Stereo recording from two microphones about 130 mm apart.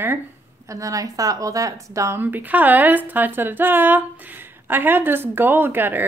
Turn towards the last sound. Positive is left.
turn(degrees=-15)  # may be behind; listen again after turning